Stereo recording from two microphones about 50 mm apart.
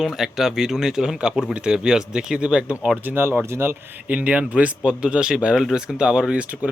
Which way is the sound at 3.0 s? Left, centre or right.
Right.